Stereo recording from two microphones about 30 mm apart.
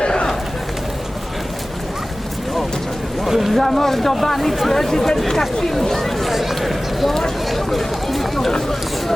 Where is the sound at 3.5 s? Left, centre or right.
Centre.